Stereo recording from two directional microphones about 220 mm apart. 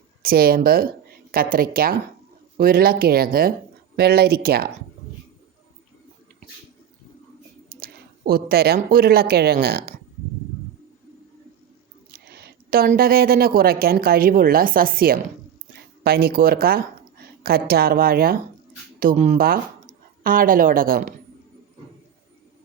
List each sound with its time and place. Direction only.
0.2 s a woman's voice: 40° right (ahead or behind)
7.7 s speech: 40° right (ahead or behind)
12.1 s speech: 45° right (ahead or behind)